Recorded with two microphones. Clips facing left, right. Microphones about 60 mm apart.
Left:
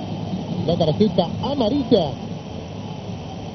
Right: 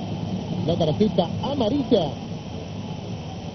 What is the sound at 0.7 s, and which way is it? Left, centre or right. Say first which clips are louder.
Speech: left 3 dB; centre.